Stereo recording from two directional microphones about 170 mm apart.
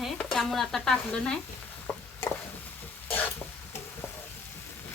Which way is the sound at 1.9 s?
15° left (ahead or behind).